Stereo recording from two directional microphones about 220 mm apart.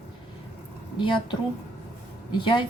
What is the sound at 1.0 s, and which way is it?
Speech, 20° left (ahead or behind).